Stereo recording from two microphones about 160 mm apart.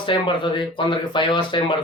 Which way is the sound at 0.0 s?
30° left (ahead or behind).